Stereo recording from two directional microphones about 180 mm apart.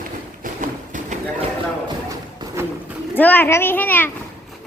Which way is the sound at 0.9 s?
40° right (ahead or behind).